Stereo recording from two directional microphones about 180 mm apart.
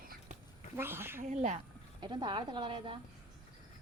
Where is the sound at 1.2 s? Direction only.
40° right (ahead or behind).